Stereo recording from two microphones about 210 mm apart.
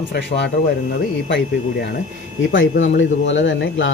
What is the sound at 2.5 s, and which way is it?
Speech, 65° left (ahead or behind).